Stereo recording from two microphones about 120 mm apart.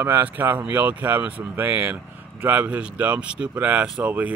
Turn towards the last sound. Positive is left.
turn(degrees=-15)  # may be behind; listen again after turning